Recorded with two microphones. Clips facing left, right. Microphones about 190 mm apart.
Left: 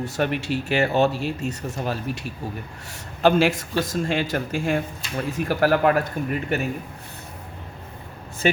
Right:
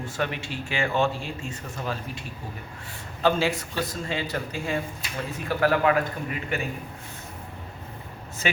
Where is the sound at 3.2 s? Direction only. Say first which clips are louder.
Left 5 dB; 90° left.